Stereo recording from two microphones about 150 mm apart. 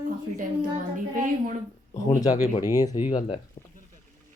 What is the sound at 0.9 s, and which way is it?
Speech, 60° right (ahead or behind).